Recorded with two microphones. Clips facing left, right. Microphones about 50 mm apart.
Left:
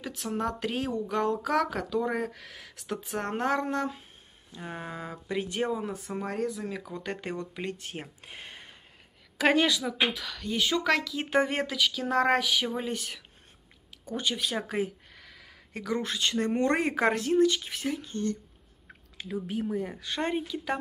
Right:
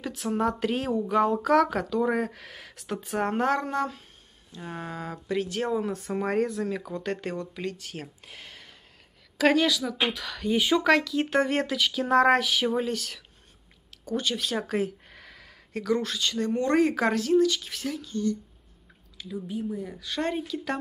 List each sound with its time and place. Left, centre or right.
0.0 s speech: centre
5.7 s speech: centre
6.1 s speech: centre
6.5 s speech: centre; by 9.9 s left
10.1 s speech: centre
12.8 s speech: centre
15.0 s a sound: centre
15.7 s speech: centre
18.1 s a woman's voice: left
18.9 s a sound: left
19.7 s a woman's voice: left
20.1 s speech: centre